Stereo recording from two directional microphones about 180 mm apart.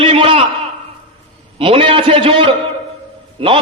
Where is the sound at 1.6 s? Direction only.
30° right (ahead or behind).